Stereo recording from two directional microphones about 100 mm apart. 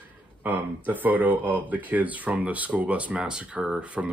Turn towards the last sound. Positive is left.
turn(degrees=-10)  # may be behind; listen again after turning